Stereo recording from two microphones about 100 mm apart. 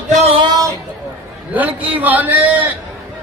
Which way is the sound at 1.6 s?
15° right (ahead or behind).